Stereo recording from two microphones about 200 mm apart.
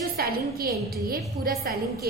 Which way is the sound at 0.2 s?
50° right (ahead or behind).